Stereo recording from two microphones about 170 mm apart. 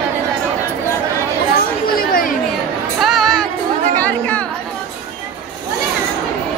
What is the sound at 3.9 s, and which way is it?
Chatter, 10° left (ahead or behind).